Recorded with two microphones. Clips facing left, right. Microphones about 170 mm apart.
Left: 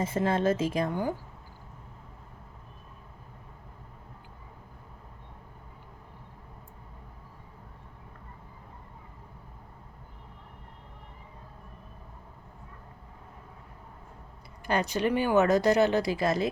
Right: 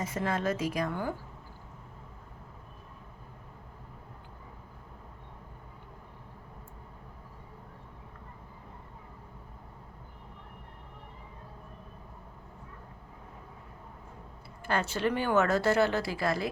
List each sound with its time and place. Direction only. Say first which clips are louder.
0.0 s a woman's voice: left 5 dB; 25° left (ahead or behind)
14.6 s speech: left 2 dB; 15° left (ahead or behind)